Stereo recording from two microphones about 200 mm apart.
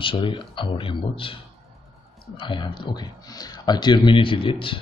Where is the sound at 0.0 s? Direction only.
25° left (ahead or behind).